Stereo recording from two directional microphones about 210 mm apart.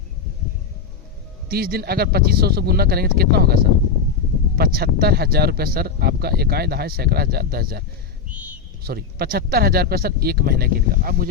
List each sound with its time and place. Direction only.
1.5 s speech: 45° right (ahead or behind)